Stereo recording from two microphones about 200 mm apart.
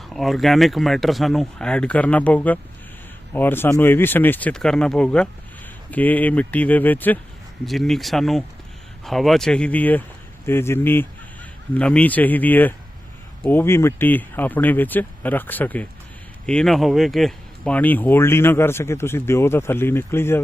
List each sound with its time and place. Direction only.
0.1 s speech: centre (ahead or behind)